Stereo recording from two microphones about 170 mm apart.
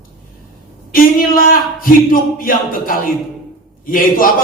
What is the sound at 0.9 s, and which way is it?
Speech, 55° left (ahead or behind).